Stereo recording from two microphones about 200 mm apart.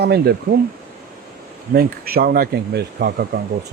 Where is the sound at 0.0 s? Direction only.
55° right (ahead or behind).